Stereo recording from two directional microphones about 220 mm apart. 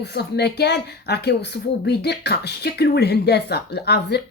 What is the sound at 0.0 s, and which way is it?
Speech, 50° left (ahead or behind).